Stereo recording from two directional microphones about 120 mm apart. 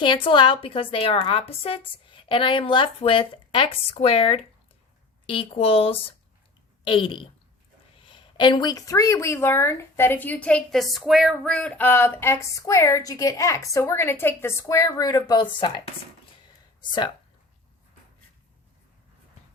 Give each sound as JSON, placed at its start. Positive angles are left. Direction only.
{"t": 0.0, "sound": "a woman's voice", "side_deg": 40}